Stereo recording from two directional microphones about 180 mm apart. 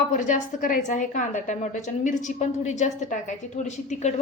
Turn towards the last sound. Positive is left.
turn(degrees=40)  # may be behind; listen again after turning